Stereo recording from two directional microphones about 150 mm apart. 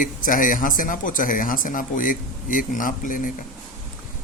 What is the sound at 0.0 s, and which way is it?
Speech, 65° left (ahead or behind).